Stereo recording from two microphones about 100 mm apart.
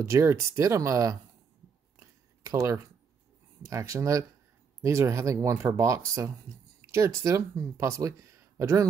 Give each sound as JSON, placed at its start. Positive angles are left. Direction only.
{"t": 0.0, "sound": "speech", "side_deg": -25}
{"t": 2.0, "sound": "a sound", "side_deg": -30}
{"t": 3.6, "sound": "speech", "side_deg": -30}